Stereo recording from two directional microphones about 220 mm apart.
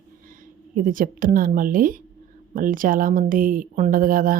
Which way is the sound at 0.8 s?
40° right (ahead or behind).